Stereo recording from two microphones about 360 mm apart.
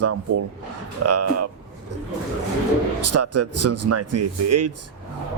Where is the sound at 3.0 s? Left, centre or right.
Right.